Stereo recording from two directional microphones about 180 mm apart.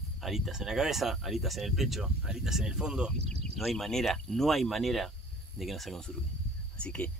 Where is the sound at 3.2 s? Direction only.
35° right (ahead or behind).